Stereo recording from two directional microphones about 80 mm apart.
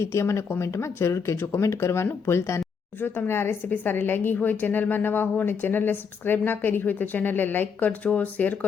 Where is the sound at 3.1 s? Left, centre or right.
Left.